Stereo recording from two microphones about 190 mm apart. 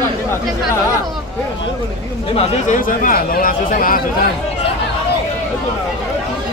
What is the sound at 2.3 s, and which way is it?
Speech, 45° left (ahead or behind).